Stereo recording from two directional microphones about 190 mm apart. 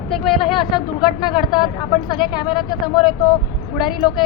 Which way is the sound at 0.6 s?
25° left (ahead or behind).